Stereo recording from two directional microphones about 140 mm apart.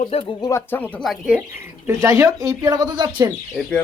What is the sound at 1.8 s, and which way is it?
Speech, 20° right (ahead or behind).